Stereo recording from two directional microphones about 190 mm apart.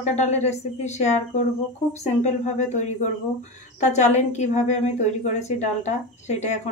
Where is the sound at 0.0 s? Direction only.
35° left (ahead or behind).